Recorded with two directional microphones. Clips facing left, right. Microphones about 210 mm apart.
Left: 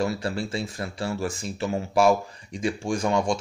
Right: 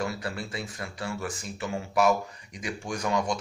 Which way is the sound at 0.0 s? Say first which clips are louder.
Left 6 dB; 25° left (ahead or behind).